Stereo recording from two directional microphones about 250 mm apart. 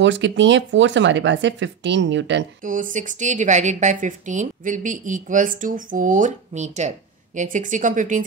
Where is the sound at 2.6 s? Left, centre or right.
Right.